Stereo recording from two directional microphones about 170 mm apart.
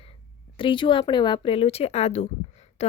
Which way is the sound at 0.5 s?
30° left (ahead or behind).